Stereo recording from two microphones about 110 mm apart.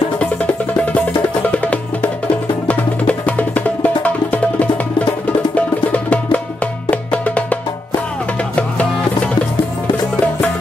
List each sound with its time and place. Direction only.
1.5 s music: 15° left (ahead or behind)